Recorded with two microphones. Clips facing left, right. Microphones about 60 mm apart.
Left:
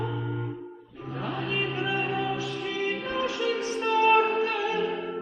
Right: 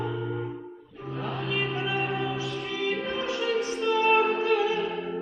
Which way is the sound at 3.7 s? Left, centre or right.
Left.